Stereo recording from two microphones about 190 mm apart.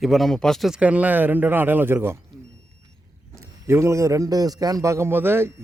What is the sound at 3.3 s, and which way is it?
A man's voice, 15° right (ahead or behind).